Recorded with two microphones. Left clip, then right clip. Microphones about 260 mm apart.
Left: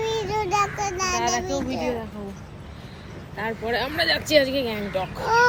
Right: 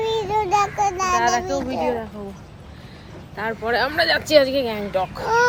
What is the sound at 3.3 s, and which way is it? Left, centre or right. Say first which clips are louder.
Speech: right 4 dB; right.